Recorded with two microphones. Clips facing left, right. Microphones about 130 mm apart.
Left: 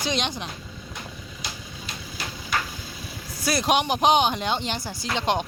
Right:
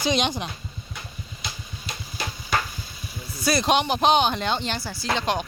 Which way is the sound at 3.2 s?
90° left.